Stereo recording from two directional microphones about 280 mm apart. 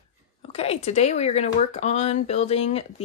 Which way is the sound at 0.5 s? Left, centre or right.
Left.